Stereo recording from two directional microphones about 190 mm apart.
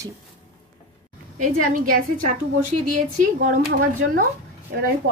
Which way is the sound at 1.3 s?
45° right (ahead or behind).